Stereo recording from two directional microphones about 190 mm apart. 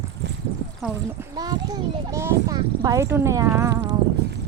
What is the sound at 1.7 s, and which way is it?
Speech, 15° right (ahead or behind).